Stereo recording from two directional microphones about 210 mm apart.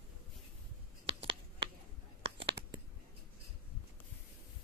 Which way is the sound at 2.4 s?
55° right (ahead or behind).